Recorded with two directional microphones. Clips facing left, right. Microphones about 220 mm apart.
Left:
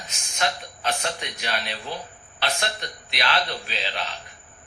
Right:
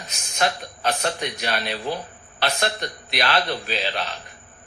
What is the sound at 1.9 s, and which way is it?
Speech, 40° right (ahead or behind).